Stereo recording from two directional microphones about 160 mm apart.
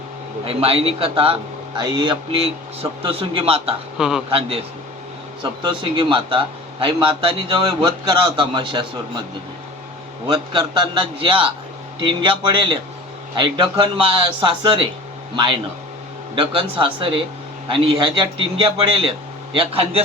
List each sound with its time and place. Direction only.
0.4 s a man's voice: 35° right (ahead or behind)
3.9 s a man's voice: 5° right (ahead or behind)
4.3 s a man's voice: 35° right (ahead or behind)
10.2 s a man's voice: 25° right (ahead or behind)
16.3 s a man's voice: 35° right (ahead or behind)
19.5 s a man's voice: 35° right (ahead or behind)